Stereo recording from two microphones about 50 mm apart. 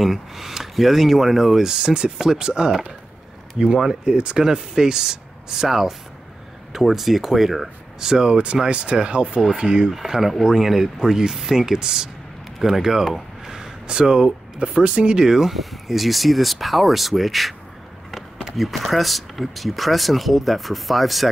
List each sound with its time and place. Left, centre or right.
0.0 s speech: centre
8.1 s speech: centre
9.9 s speech: centre
15.2 s speech: centre